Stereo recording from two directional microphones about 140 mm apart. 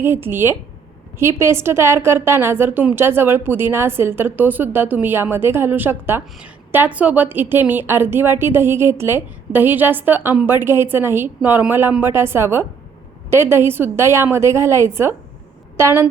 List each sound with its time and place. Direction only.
0.0 s a woman's voice: 15° right (ahead or behind)